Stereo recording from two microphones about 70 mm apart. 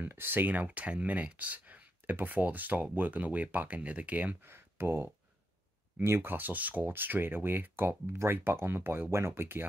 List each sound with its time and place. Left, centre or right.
0.0 s speech: right
4.5 s speech: right